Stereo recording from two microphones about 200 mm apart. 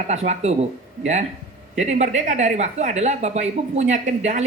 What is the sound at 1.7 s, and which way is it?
Speech, 35° right (ahead or behind).